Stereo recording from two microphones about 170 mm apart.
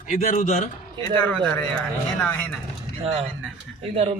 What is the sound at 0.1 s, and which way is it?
Speech, 50° left (ahead or behind).